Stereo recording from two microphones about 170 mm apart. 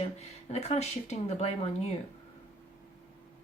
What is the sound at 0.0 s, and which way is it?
Speech, 40° left (ahead or behind).